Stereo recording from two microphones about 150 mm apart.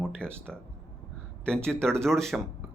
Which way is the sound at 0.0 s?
5° left (ahead or behind).